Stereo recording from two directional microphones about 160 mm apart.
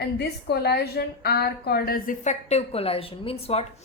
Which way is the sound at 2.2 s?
45° left (ahead or behind).